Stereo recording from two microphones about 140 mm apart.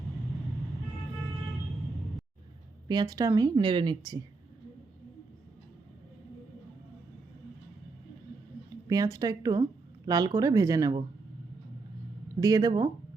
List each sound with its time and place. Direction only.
2.9 s speech: 25° right (ahead or behind)
8.9 s speech: 25° right (ahead or behind)
12.4 s speech: 25° right (ahead or behind)